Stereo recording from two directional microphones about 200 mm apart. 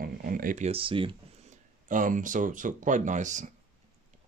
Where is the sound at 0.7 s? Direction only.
25° right (ahead or behind).